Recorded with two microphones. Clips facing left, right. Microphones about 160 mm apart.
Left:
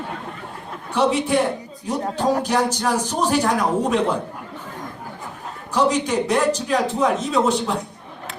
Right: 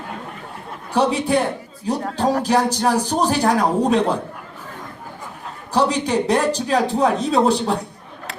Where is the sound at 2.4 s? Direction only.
35° right (ahead or behind).